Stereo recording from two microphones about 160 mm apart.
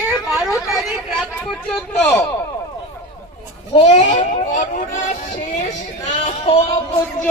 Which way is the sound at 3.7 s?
45° left (ahead or behind).